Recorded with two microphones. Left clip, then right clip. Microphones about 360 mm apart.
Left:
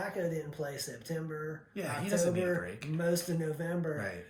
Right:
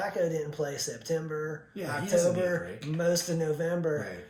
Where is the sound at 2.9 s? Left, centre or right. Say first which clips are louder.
Right 5 dB; centre.